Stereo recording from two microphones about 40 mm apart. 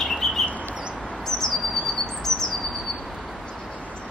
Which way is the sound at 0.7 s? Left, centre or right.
Right.